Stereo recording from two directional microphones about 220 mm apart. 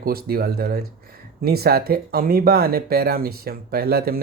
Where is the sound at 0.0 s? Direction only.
45° right (ahead or behind).